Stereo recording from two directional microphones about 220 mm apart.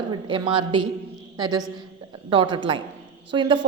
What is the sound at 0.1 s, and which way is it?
A woman's voice, 20° right (ahead or behind).